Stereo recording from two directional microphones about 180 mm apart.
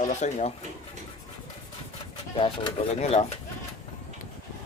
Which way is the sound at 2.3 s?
30° left (ahead or behind).